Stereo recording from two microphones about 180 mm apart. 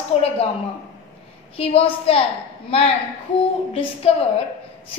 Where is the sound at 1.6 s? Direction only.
35° left (ahead or behind).